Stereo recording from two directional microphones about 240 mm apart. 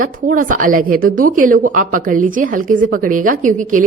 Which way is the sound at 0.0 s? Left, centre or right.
Right.